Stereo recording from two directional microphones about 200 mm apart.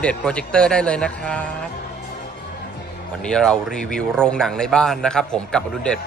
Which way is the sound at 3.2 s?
5° left (ahead or behind).